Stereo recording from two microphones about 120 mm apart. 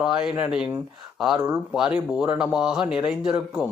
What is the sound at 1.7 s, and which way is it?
Speech, 5° right (ahead or behind).